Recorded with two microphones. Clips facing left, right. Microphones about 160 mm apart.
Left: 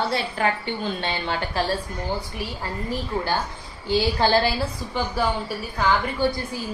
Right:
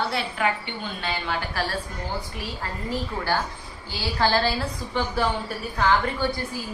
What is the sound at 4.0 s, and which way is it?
Speech, 15° left (ahead or behind).